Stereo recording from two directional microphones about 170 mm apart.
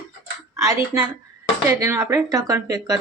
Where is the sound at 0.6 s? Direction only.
20° right (ahead or behind).